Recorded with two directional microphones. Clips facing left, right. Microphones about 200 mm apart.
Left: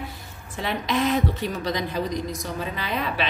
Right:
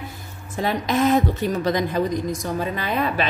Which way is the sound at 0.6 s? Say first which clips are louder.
Right 4 dB; 45° right (ahead or behind).